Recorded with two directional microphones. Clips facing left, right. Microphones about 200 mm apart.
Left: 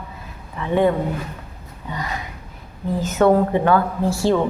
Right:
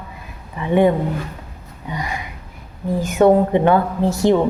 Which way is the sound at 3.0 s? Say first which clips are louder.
Right 2 dB; 15° right (ahead or behind).